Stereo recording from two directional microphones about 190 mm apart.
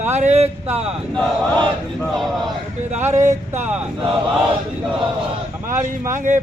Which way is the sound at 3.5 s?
10° right (ahead or behind).